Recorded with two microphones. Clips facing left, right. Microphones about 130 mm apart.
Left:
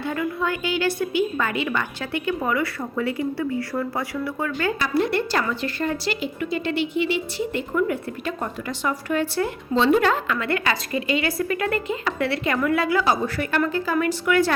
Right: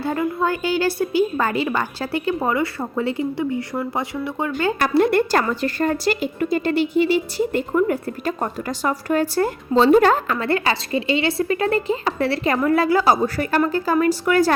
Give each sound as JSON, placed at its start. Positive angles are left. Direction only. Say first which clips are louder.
{"t": 0.1, "sound": "a woman's voice", "louder": "right 4 dB", "side_deg": -35}
{"t": 4.8, "sound": "a woman's voice", "louder": "right 7 dB", "side_deg": -55}